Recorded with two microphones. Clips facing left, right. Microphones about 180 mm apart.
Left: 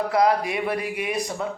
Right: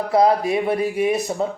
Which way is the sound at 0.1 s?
25° right (ahead or behind).